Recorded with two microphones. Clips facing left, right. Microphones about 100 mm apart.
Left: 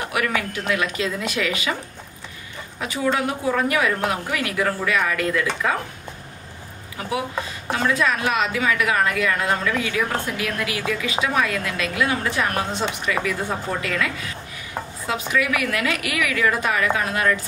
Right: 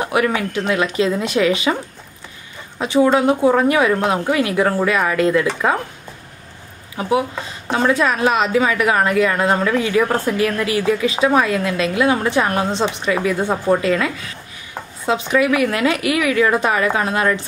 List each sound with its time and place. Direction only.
0.0 s a woman's voice: 25° right (ahead or behind)
2.8 s a woman's voice: 25° right (ahead or behind)
7.7 s a woman's voice: 30° right (ahead or behind)